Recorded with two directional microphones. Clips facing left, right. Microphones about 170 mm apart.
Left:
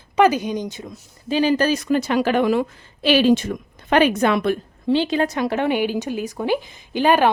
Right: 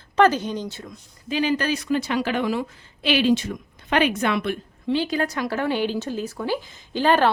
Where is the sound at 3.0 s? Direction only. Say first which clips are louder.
Left 4 dB; 45° left (ahead or behind).